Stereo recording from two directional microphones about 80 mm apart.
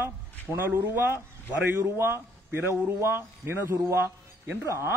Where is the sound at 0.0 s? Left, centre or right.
Right.